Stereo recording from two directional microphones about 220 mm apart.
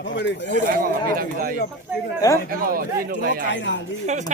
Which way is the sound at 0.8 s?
40° right (ahead or behind).